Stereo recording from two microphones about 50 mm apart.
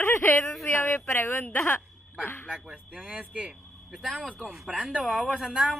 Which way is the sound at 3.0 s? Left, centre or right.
Right.